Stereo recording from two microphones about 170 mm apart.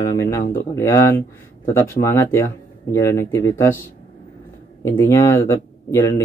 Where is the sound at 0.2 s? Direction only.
15° left (ahead or behind).